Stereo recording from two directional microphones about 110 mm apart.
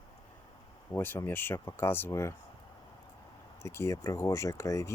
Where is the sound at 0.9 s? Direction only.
20° left (ahead or behind).